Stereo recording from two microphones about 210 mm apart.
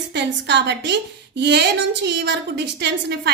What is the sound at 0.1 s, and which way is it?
A woman's voice, 55° right (ahead or behind).